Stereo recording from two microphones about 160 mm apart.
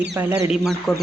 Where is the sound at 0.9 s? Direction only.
Centre (ahead or behind).